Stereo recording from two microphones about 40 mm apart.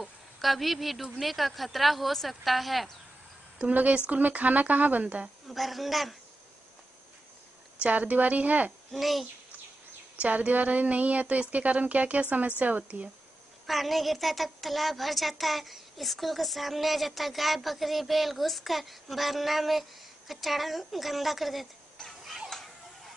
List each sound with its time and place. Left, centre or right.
0.0 s a sound: centre
1.2 s a woman's voice: centre
3.5 s a woman's voice: right
5.0 s a woman's voice: right
5.5 s a woman's voice: centre
7.9 s a woman's voice: right
8.9 s a woman's voice: centre
10.2 s a woman's voice: right
13.7 s a woman's voice: centre